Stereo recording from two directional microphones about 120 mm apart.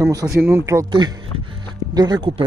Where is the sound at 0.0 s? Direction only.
30° right (ahead or behind).